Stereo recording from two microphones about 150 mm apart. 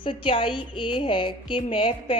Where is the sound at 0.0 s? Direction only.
35° left (ahead or behind).